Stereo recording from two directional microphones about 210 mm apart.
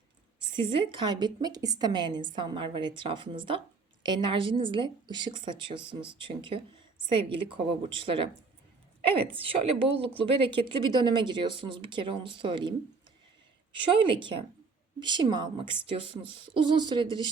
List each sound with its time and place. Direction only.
0.3 s a woman's voice: 25° right (ahead or behind)
13.9 s a woman's voice: 25° right (ahead or behind)